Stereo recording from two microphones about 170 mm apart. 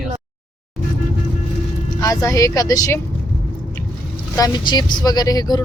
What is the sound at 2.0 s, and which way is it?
Speech, 20° left (ahead or behind).